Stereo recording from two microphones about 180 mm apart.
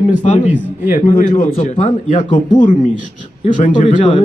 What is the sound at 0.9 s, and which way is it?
A man's voice, 45° left (ahead or behind).